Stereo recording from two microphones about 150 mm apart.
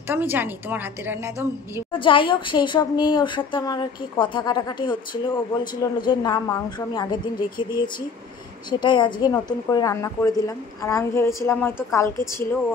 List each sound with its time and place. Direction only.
0.1 s a woman's voice: 15° right (ahead or behind)
1.9 s a woman's voice: 35° left (ahead or behind); by 12.4 s 15° left (ahead or behind)